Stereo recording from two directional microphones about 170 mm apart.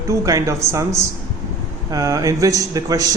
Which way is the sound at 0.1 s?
15° right (ahead or behind).